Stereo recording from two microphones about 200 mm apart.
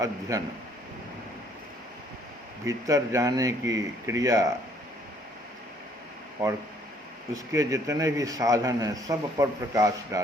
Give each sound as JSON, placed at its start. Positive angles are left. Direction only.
{"t": 0.0, "sound": "a man's voice", "side_deg": -15}
{"t": 2.6, "sound": "a man's voice", "side_deg": -15}
{"t": 7.3, "sound": "a man's voice", "side_deg": -15}